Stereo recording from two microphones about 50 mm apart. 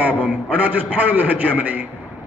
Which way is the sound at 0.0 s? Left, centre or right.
Right.